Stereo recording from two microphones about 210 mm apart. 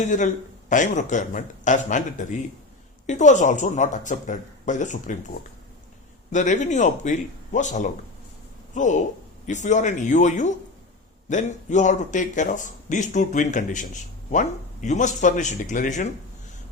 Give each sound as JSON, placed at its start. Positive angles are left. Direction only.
{"t": 0.0, "sound": "speech", "side_deg": 35}